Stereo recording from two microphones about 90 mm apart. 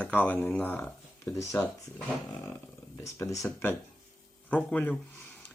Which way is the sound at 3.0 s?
35° left (ahead or behind).